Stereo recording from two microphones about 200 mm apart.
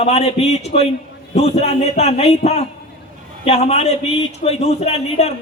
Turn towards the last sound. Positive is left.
turn(degrees=30)  # may be behind; listen again after turning